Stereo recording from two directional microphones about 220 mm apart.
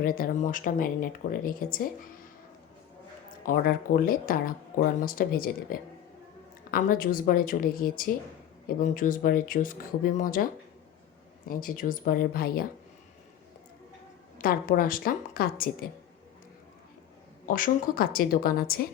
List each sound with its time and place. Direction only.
0.0 s speech: 40° left (ahead or behind)
3.4 s speech: 40° left (ahead or behind)
11.4 s speech: 40° left (ahead or behind)
14.3 s speech: 40° left (ahead or behind)
17.5 s speech: 40° left (ahead or behind)